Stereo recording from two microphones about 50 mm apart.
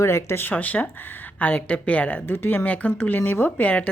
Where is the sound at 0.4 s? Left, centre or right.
Left.